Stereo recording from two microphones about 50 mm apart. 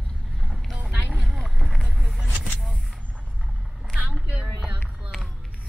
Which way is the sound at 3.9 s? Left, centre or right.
Right.